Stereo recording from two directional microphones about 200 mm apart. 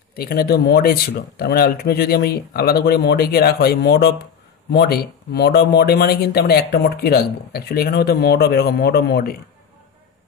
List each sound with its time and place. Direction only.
0.1 s speech: 50° left (ahead or behind)